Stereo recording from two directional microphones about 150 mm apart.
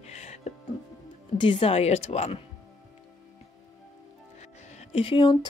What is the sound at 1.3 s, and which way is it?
Speech, 35° left (ahead or behind).